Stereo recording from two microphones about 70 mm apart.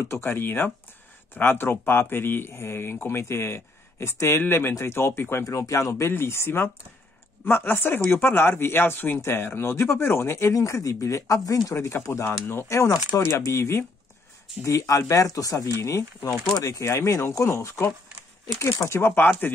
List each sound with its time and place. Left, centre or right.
0.1 s speech: left
5.4 s speech: left
10.5 s speech: left
13.2 s speech: left